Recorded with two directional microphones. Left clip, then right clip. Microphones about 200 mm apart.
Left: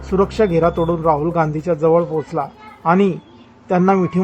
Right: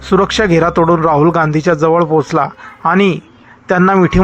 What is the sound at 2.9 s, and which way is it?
Speech, 5° right (ahead or behind).